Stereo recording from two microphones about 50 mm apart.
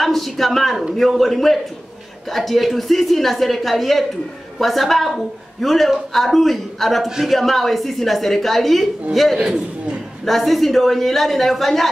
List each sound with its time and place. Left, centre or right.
0.0 s a woman's voice: centre
9.4 s a man's voice: centre
10.2 s a woman's voice: centre